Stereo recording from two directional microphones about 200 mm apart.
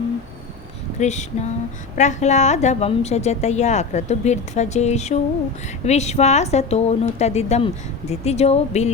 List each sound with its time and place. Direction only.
0.9 s a woman's voice: 35° left (ahead or behind)